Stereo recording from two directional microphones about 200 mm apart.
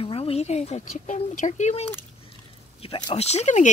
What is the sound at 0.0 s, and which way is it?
Speech, 30° left (ahead or behind).